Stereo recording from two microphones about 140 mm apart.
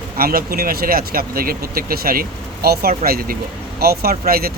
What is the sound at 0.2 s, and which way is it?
Speech, 90° right.